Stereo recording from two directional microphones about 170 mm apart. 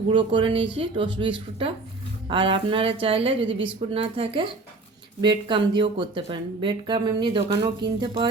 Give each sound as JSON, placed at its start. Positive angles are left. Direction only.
{"t": 0.1, "sound": "a woman's voice", "side_deg": -30}